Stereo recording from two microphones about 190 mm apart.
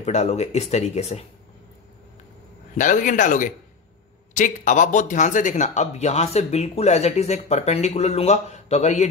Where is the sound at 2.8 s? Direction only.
40° left (ahead or behind).